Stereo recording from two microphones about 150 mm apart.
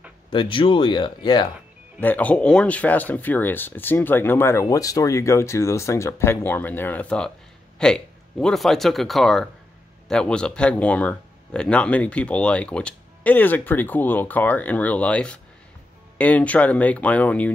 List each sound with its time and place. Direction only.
0.3 s speech: 35° left (ahead or behind)
2.0 s speech: 10° left (ahead or behind)